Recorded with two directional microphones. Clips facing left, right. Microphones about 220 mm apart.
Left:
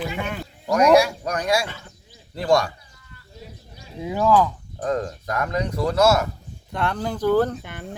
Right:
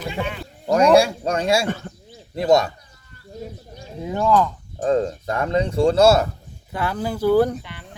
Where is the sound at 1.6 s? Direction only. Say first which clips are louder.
Right 9 dB; 45° right (ahead or behind).